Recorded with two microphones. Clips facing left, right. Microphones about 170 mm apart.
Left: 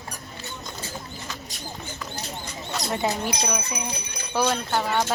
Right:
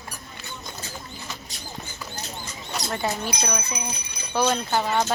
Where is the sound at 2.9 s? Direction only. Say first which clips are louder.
Left 2 dB; 15° left (ahead or behind).